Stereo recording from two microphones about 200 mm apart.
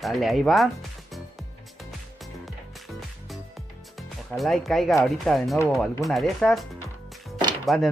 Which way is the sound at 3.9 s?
Centre (ahead or behind).